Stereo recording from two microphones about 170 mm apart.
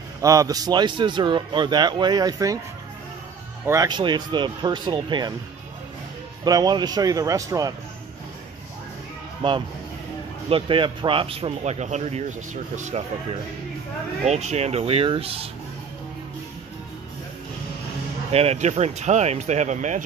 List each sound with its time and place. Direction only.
0.2 s a man's voice: 20° right (ahead or behind)
3.6 s a man's voice: 20° right (ahead or behind)
6.4 s a man's voice: 25° right (ahead or behind)
10.5 s a man's voice: 30° right (ahead or behind)
18.3 s a man's voice: 35° right (ahead or behind)